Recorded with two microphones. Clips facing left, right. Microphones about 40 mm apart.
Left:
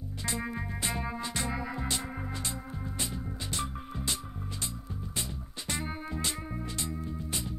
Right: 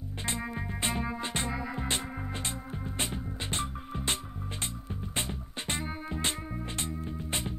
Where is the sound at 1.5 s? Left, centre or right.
Centre.